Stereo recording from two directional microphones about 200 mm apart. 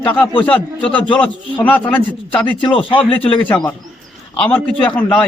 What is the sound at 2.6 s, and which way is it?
Speech, 25° left (ahead or behind).